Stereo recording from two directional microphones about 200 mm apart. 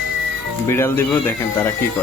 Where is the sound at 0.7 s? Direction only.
10° left (ahead or behind).